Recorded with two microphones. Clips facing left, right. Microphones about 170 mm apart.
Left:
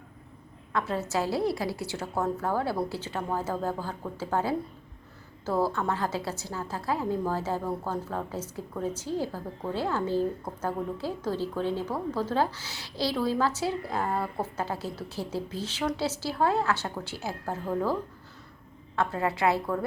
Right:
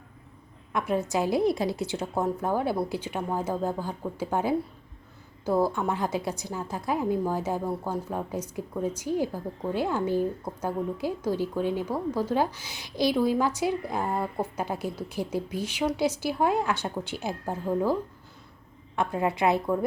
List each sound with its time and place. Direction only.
0.7 s a woman's voice: 15° right (ahead or behind)
18.9 s a woman's voice: 15° right (ahead or behind)